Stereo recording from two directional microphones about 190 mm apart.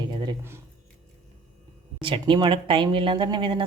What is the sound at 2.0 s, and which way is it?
A woman's voice, 25° right (ahead or behind).